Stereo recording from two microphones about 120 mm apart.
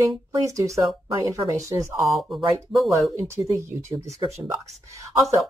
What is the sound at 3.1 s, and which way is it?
Speech, 25° right (ahead or behind).